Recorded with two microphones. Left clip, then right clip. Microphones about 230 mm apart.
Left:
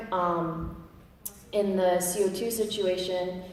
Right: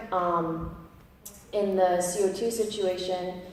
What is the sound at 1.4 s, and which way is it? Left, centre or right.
A woman's voice, left.